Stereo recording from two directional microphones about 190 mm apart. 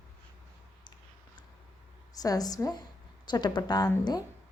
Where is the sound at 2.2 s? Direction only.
20° left (ahead or behind).